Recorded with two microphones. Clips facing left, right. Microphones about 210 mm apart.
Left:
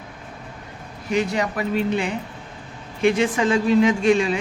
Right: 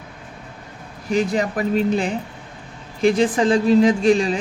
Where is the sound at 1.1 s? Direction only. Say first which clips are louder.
Right 2 dB; 35° right (ahead or behind).